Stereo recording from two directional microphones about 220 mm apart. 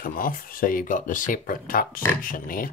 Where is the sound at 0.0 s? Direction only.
40° left (ahead or behind).